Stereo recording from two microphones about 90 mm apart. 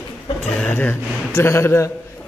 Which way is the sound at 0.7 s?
20° left (ahead or behind).